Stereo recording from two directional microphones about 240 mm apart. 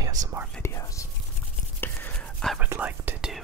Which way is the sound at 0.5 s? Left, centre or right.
Centre.